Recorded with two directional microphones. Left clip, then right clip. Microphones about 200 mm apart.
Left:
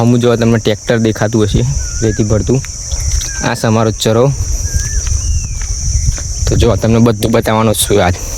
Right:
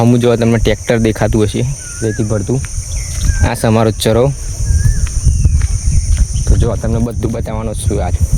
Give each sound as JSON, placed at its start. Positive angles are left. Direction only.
{"t": 0.0, "sound": "speech", "side_deg": 5}
{"t": 2.0, "sound": "speech", "side_deg": 25}
{"t": 3.4, "sound": "speech", "side_deg": 5}
{"t": 6.6, "sound": "speech", "side_deg": 45}